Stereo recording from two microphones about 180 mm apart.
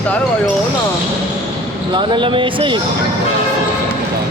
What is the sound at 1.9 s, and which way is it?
Speech, 25° right (ahead or behind).